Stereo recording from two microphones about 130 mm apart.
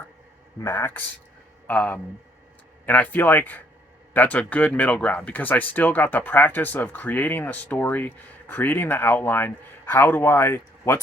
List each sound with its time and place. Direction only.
0.6 s speech: 20° left (ahead or behind)